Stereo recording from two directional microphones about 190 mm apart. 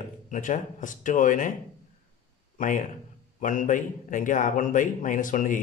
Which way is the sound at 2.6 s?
45° left (ahead or behind).